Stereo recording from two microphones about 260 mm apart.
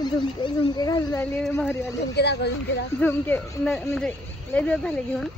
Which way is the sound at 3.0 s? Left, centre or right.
Centre.